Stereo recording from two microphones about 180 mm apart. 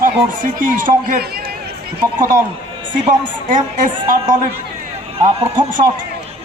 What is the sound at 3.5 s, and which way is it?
Speech, 45° right (ahead or behind).